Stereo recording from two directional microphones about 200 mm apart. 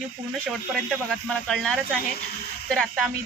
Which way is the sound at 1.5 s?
Centre (ahead or behind).